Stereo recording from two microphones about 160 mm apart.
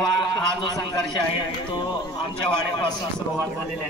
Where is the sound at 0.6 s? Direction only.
25° left (ahead or behind).